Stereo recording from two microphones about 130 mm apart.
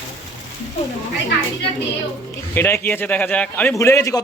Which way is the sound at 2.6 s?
15° left (ahead or behind).